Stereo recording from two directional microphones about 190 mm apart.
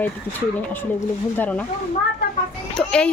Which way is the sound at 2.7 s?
5° left (ahead or behind).